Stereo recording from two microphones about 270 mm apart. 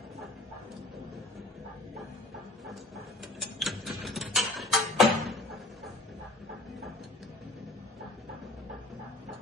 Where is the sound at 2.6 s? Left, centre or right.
Centre.